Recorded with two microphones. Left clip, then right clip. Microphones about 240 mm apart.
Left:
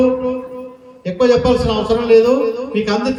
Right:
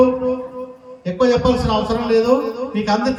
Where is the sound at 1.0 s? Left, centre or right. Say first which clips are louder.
Left 3 dB; centre.